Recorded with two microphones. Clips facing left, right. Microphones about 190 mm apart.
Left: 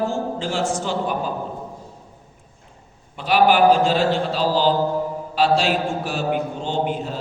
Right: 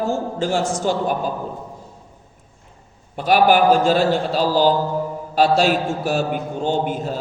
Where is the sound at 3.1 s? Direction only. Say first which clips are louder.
Right 2 dB; 45° right (ahead or behind).